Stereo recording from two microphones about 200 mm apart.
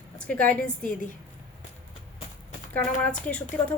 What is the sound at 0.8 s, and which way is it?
Speech, 40° left (ahead or behind).